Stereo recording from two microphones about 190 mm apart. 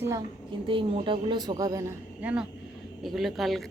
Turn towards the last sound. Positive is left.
turn(degrees=0)  # may be behind; listen again after turning